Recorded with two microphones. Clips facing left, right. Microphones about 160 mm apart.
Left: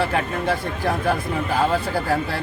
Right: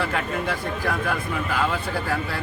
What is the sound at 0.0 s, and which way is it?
Speech, 30° left (ahead or behind).